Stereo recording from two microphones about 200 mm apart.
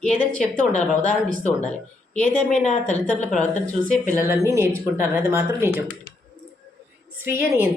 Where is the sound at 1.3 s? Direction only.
40° left (ahead or behind).